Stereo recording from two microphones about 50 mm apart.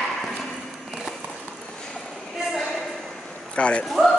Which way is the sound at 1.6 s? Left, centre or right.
Centre.